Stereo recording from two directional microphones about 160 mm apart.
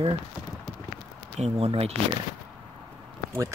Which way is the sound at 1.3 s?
40° right (ahead or behind).